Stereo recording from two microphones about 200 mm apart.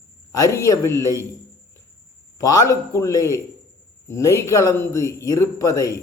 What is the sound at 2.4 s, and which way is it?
A man's voice, 15° left (ahead or behind).